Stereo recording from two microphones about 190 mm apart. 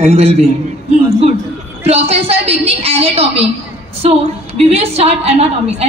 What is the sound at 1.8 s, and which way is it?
A woman's voice, 35° right (ahead or behind).